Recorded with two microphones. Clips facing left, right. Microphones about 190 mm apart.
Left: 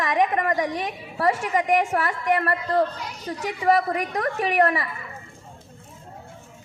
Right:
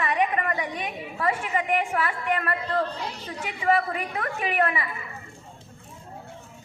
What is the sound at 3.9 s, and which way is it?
Speech, 40° left (ahead or behind).